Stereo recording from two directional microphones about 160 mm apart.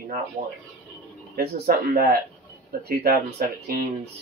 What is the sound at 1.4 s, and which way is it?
Speech, 75° right (ahead or behind).